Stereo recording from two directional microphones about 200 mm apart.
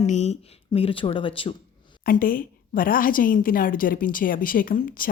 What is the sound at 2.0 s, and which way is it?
A woman's voice, 45° left (ahead or behind).